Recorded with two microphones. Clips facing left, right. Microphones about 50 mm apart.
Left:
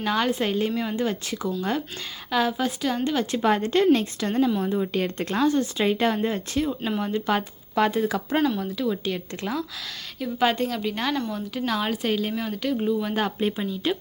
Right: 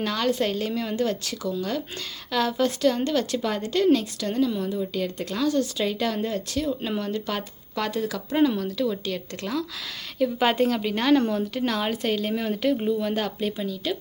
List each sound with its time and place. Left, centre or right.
0.0 s speech: centre
3.4 s speech: left
8.5 s speech: centre
10.2 s speech: centre
13.0 s speech: centre
13.2 s speech: left